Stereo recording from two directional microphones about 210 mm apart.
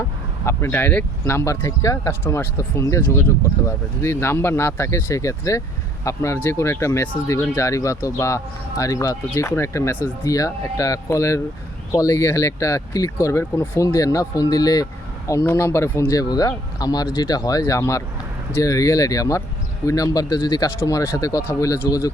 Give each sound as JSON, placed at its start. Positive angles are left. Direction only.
{"t": 0.4, "sound": "speech", "side_deg": 10}